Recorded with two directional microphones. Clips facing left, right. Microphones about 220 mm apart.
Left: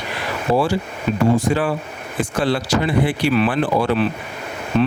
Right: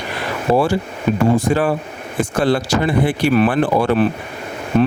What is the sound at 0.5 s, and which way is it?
Speech, 55° right (ahead or behind).